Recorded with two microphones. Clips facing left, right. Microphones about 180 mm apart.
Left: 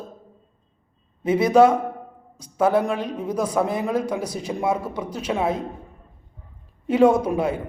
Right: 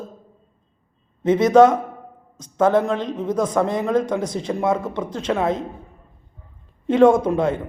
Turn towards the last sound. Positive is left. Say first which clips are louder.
# right 2 dB
turn(degrees=10)  # may be behind; listen again after turning